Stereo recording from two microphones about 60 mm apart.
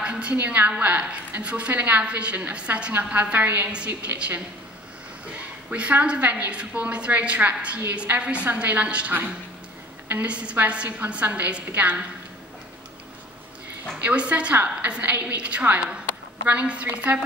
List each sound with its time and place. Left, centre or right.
0.0 s a woman's voice: centre
14.0 s a woman's voice: right